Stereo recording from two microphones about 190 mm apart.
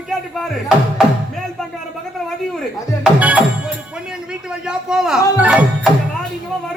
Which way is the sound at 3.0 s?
5° right (ahead or behind).